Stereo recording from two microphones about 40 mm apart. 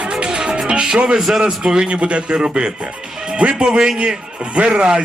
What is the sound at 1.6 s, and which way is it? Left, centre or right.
Speech, right.